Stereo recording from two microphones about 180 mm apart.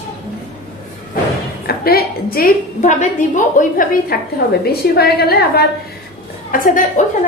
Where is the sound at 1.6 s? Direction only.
55° left (ahead or behind).